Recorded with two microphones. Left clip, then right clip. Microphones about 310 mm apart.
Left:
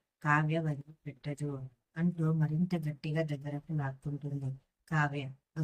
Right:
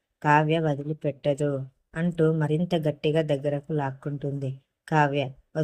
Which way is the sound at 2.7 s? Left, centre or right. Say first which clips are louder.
Right 15 dB; centre.